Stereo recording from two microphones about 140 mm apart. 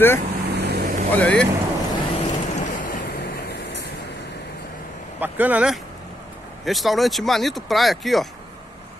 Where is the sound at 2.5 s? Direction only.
70° left (ahead or behind).